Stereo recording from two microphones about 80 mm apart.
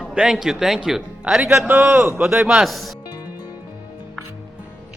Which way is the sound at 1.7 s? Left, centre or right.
Right.